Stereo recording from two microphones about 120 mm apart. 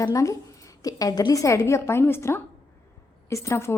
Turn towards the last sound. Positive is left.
turn(degrees=20)  # may be behind; listen again after turning